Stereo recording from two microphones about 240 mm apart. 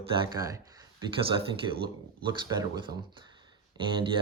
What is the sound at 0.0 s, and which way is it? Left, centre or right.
Speech, centre.